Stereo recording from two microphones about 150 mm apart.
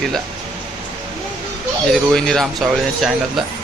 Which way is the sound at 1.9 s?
Centre (ahead or behind).